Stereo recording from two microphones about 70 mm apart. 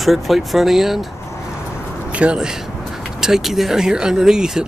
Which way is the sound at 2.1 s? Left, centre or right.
Centre.